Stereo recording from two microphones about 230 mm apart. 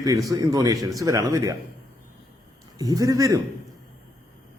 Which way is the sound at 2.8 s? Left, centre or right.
Centre.